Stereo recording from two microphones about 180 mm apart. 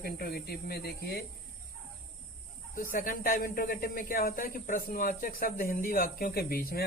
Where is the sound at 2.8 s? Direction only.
50° left (ahead or behind).